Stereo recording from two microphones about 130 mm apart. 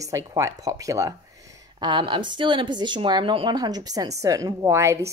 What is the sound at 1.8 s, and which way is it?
Speech, 40° right (ahead or behind).